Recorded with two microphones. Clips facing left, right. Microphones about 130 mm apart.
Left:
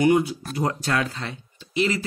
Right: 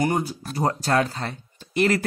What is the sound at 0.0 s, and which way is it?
Speech, 40° right (ahead or behind).